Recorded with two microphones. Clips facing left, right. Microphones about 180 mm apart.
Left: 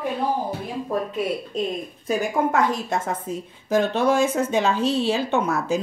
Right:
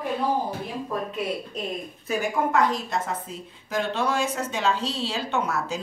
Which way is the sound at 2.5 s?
50° left (ahead or behind).